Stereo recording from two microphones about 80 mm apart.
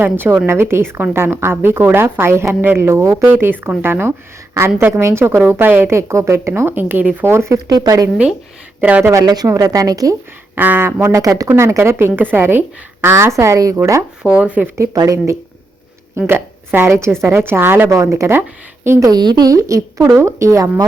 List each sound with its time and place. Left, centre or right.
0.0 s a woman's voice: right
7.3 s speech: right
7.7 s a woman's voice: right
8.8 s a woman's voice: centre
9.1 s a woman's voice: right
10.5 s a woman's voice: right
11.1 s speech: right
14.2 s speech: centre
14.9 s a woman's voice: right
16.1 s a woman's voice: right
17.9 s a woman's voice: right
19.1 s speech: right
19.6 s speech: right